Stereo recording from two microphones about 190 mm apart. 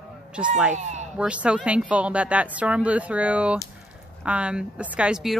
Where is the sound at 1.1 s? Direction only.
5° right (ahead or behind).